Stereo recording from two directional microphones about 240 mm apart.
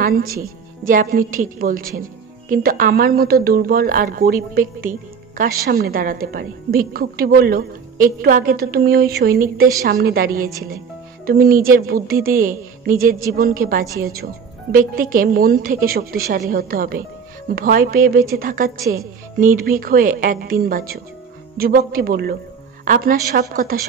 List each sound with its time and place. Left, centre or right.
0.0 s a woman's voice: right